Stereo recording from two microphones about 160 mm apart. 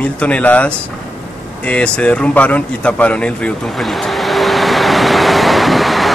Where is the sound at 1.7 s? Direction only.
5° left (ahead or behind).